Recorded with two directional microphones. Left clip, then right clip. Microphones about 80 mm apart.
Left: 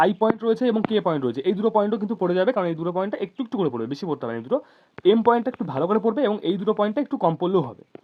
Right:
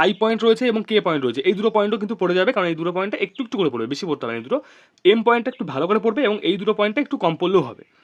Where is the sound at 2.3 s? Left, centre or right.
Right.